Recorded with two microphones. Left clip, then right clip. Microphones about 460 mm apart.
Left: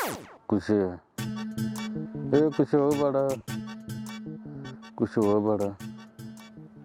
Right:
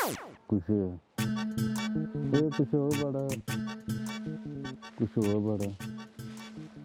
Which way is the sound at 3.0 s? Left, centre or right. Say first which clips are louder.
Left 9 dB; centre.